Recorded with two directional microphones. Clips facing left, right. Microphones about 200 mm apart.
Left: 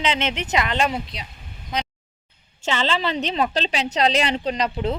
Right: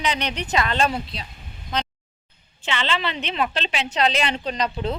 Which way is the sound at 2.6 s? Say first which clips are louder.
Left 3 dB; 40° left (ahead or behind).